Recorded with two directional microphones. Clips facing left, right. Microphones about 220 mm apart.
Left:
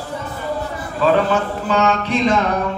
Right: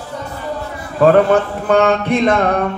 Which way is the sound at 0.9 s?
55° right (ahead or behind).